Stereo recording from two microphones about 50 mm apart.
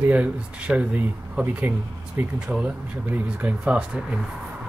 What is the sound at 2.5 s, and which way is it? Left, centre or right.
Speech, centre.